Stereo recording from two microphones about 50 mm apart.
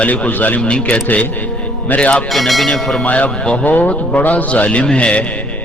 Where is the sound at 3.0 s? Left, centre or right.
Left.